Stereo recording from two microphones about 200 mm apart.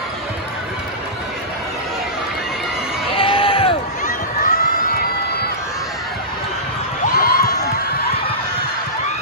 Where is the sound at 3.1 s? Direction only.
25° left (ahead or behind).